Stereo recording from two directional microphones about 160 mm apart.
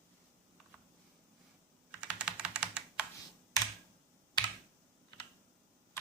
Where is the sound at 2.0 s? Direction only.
5° right (ahead or behind).